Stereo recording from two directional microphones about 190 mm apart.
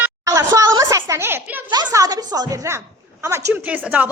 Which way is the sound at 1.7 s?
20° right (ahead or behind).